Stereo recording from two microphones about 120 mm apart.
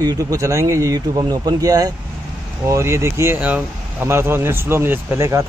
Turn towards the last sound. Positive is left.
turn(degrees=-25)  # may be behind; listen again after turning